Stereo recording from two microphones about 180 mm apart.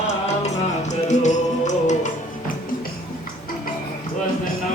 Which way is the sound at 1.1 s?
40° left (ahead or behind).